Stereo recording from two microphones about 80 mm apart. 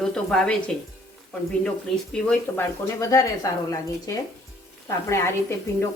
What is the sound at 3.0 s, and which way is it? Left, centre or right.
A woman's voice, left.